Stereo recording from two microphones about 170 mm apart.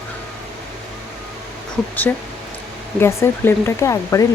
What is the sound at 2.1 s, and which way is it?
Speech, 10° left (ahead or behind).